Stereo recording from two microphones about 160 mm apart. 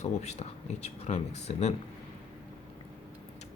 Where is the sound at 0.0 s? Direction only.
45° left (ahead or behind).